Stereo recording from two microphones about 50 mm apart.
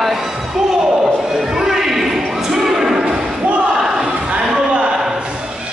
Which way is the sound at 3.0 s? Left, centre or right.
Centre.